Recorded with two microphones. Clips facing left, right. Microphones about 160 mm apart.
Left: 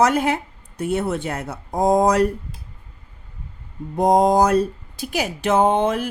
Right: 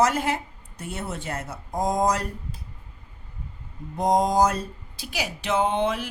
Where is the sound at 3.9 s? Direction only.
60° left (ahead or behind).